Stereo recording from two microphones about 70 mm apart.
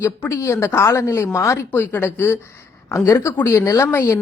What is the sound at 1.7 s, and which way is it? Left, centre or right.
Speech, left.